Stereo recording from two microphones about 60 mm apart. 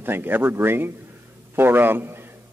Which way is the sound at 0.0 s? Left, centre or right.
Right.